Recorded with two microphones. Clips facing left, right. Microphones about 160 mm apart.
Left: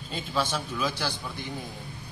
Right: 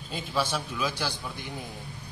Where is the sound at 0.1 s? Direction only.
5° right (ahead or behind).